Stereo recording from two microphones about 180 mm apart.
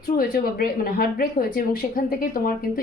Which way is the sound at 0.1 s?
55° left (ahead or behind).